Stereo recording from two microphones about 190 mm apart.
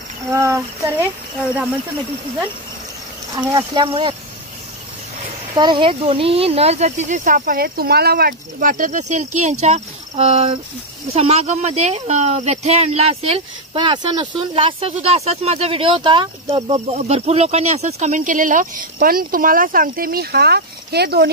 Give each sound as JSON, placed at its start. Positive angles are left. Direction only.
{"t": 0.3, "sound": "child singing", "side_deg": -15}
{"t": 3.3, "sound": "speech", "side_deg": -20}
{"t": 5.5, "sound": "speech", "side_deg": -20}